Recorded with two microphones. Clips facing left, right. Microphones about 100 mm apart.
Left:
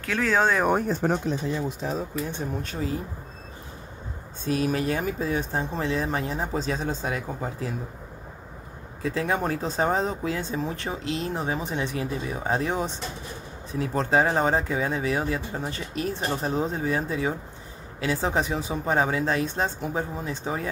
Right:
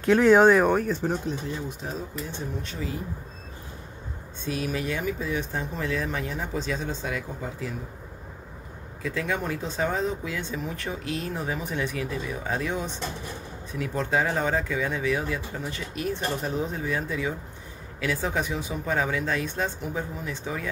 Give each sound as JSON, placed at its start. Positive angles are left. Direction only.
{"t": 0.0, "sound": "speech", "side_deg": -20}
{"t": 1.0, "sound": "speech", "side_deg": 60}
{"t": 1.8, "sound": "speech", "side_deg": 90}
{"t": 2.6, "sound": "speech", "side_deg": 40}
{"t": 4.5, "sound": "speech", "side_deg": 40}
{"t": 9.0, "sound": "speech", "side_deg": 35}